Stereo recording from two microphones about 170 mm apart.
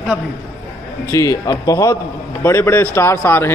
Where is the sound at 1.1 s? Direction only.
20° left (ahead or behind).